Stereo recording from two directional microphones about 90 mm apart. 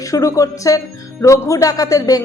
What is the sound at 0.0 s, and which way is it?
A woman's voice, 40° left (ahead or behind).